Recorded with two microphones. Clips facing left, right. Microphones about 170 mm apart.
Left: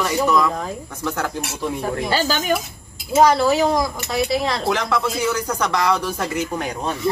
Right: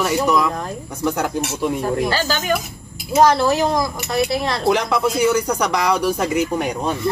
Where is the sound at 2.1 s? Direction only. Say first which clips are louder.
Even; 15° left (ahead or behind).